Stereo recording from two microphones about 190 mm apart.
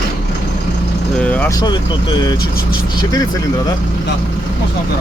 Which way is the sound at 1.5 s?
25° left (ahead or behind).